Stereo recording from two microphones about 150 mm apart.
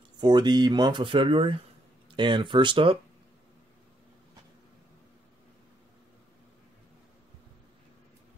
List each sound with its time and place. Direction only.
0.2 s speech: 30° right (ahead or behind)